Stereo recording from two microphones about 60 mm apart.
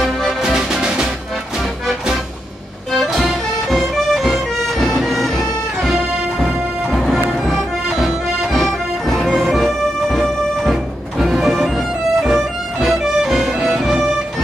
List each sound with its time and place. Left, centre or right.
0.0 s music: centre
3.1 s music: centre